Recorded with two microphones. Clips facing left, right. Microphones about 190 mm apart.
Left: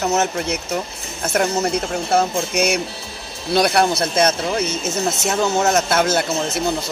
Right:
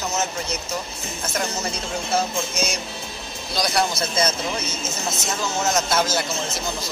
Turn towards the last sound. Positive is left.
turn(degrees=60)  # may be behind; listen again after turning